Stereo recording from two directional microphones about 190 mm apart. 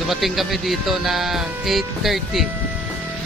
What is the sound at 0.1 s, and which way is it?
Speech, centre (ahead or behind).